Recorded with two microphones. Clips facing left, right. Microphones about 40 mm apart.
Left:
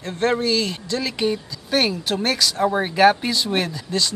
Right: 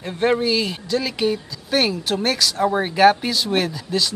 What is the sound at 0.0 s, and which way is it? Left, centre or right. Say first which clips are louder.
Speech: right 2 dB; centre.